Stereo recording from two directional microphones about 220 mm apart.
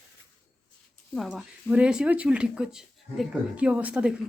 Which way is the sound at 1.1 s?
Centre (ahead or behind).